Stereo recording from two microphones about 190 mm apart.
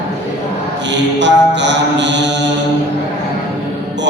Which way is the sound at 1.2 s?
70° right (ahead or behind).